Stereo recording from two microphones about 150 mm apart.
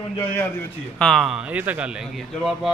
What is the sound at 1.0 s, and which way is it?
Speech, 5° left (ahead or behind).